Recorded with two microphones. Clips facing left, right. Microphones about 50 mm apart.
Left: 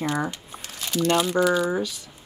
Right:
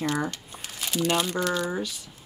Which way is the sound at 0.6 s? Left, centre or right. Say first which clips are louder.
Left 3 dB; centre.